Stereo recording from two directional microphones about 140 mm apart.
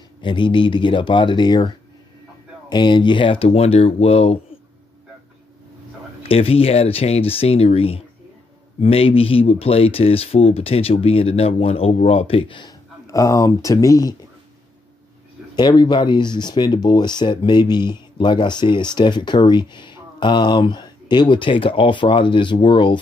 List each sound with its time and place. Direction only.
0.2 s speech: 35° left (ahead or behind)
2.7 s speech: 35° left (ahead or behind)
6.2 s speech: 45° left (ahead or behind)
13.0 s speech: 25° left (ahead or behind)
15.5 s speech: 30° left (ahead or behind)